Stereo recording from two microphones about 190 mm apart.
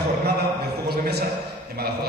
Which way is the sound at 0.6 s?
55° right (ahead or behind).